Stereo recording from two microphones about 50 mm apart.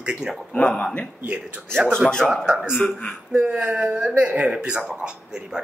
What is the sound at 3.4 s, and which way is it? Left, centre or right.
Speech, right.